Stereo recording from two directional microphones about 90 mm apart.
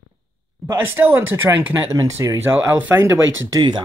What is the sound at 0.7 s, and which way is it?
Speech, 20° right (ahead or behind).